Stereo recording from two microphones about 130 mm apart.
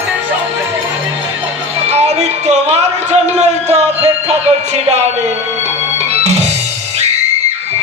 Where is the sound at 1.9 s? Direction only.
55° right (ahead or behind).